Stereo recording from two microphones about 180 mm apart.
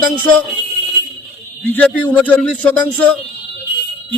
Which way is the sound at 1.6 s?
10° left (ahead or behind).